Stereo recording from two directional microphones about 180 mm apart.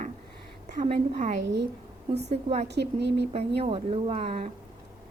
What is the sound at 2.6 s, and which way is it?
Speech, 70° right (ahead or behind).